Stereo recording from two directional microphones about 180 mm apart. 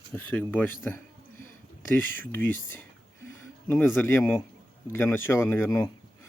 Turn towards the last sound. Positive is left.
turn(degrees=15)  # may be behind; listen again after turning